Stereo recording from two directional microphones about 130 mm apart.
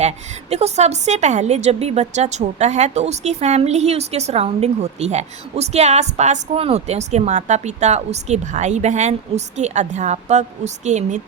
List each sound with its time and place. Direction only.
0.5 s a woman's voice: 55° right (ahead or behind)